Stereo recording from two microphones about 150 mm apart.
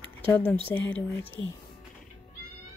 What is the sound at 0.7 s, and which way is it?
Music, 15° left (ahead or behind).